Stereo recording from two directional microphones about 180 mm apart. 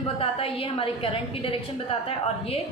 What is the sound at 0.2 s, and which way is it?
A woman's voice, 30° left (ahead or behind).